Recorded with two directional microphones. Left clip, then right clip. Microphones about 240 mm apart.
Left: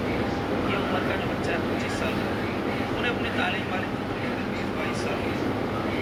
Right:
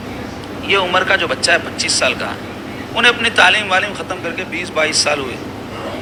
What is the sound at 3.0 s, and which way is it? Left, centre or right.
Speech, right.